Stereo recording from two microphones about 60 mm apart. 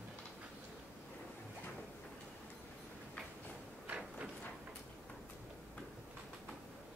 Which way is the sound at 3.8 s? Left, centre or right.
Right.